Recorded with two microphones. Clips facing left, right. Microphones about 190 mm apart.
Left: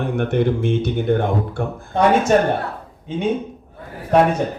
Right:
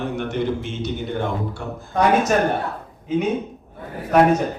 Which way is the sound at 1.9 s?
30° left (ahead or behind).